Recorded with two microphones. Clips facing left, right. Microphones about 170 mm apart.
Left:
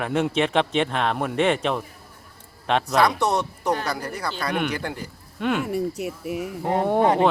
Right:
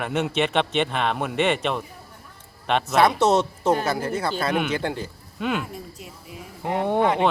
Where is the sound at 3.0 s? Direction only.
20° right (ahead or behind).